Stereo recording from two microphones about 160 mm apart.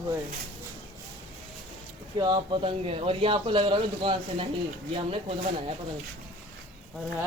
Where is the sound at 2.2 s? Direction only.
25° right (ahead or behind).